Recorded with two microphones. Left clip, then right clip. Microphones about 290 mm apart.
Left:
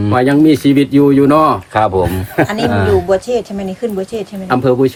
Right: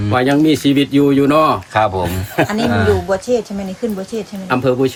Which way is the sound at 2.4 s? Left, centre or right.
Left.